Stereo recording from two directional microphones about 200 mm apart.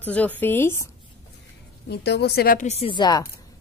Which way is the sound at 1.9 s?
55° left (ahead or behind).